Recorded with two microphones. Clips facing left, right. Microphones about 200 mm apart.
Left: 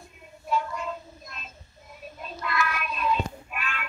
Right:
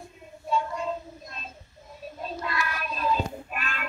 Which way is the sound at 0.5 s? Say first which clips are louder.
Right 1 dB; 30° right (ahead or behind).